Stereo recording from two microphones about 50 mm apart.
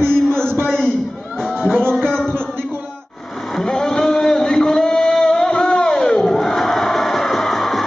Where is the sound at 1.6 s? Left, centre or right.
Centre.